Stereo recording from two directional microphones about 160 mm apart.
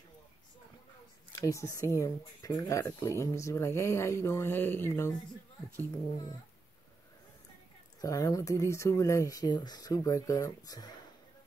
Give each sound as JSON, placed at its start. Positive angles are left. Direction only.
{"t": 1.3, "sound": "speech", "side_deg": 20}
{"t": 8.0, "sound": "speech", "side_deg": 20}